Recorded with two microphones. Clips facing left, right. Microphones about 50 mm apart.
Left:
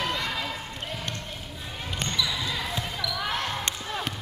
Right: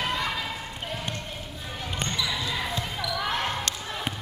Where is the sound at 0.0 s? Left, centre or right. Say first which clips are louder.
Right 1 dB; centre.